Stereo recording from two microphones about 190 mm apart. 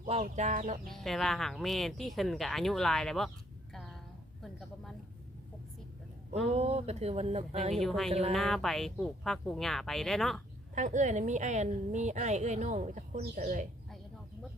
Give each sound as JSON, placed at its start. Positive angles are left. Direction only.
{"t": 0.1, "sound": "a woman's voice", "side_deg": -35}
{"t": 0.9, "sound": "speech", "side_deg": 0}
{"t": 6.5, "sound": "a woman's voice", "side_deg": -35}
{"t": 7.8, "sound": "speech", "side_deg": 0}
{"t": 10.8, "sound": "a woman's voice", "side_deg": -40}